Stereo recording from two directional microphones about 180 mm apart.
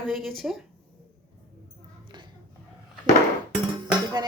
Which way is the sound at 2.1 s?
25° right (ahead or behind).